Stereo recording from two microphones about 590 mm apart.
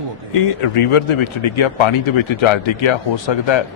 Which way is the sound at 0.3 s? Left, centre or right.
Left.